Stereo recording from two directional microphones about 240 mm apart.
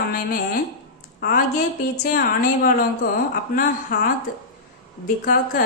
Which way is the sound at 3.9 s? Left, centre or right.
Left.